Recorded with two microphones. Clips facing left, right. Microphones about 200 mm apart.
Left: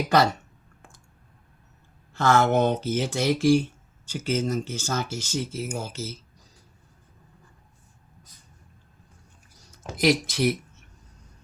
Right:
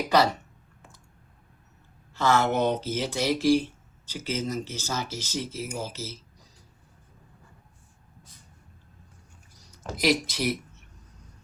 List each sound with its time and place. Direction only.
0.8 s clicking: 50° left (ahead or behind)
2.1 s speech: 50° left (ahead or behind)
10.0 s speech: 50° left (ahead or behind)